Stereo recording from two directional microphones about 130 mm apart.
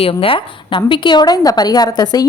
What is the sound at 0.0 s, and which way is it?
A woman's voice, 45° left (ahead or behind).